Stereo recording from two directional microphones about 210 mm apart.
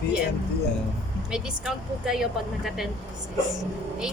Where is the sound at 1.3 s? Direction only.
5° right (ahead or behind).